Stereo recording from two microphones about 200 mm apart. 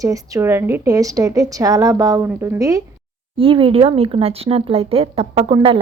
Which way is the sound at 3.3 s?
25° right (ahead or behind).